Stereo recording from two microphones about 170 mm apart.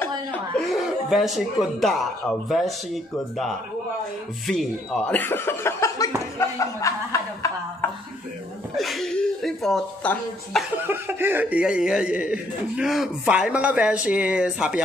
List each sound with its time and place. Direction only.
0.7 s speech: centre (ahead or behind); by 6.0 s 15° left (ahead or behind)
6.3 s chuckle: 20° left (ahead or behind)
8.7 s speech: centre (ahead or behind)
10.9 s speech: 10° right (ahead or behind)